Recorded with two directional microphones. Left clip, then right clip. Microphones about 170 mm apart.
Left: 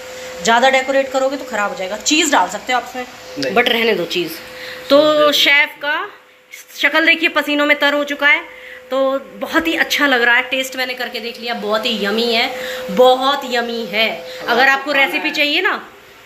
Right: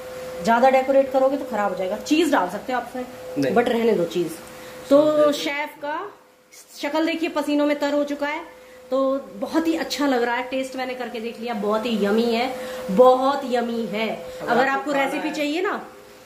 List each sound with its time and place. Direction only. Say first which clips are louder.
0.4 s a woman's voice: left 4 dB; 5° right (ahead or behind)
8.9 s speech: left 5 dB; 15° left (ahead or behind)
9.5 s a woman's voice: left 8 dB; 10° right (ahead or behind)